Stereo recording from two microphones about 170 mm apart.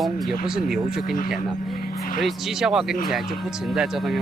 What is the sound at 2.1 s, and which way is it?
Speech, centre (ahead or behind).